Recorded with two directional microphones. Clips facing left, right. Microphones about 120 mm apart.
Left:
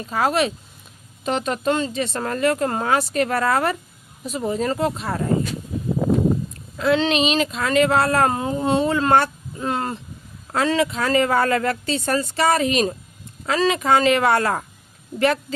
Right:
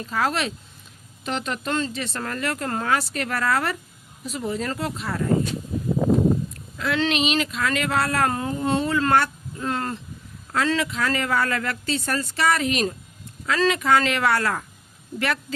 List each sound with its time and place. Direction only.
0.1 s speech: 20° left (ahead or behind)
6.7 s speech: 25° left (ahead or behind)